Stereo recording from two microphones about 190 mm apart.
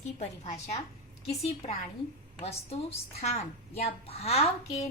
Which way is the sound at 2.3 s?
30° left (ahead or behind).